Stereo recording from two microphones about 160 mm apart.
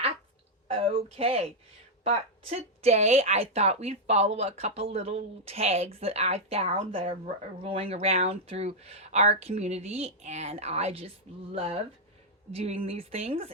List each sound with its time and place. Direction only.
0.7 s speech: 35° right (ahead or behind)